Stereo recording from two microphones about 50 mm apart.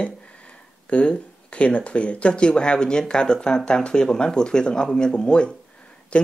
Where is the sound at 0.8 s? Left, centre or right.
Left.